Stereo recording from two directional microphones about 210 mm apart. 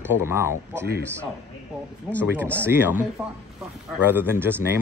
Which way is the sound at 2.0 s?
5° left (ahead or behind).